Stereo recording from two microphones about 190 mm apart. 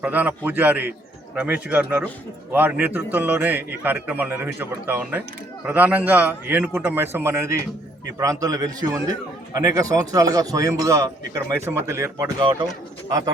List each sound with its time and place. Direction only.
0.0 s speech: 10° right (ahead or behind)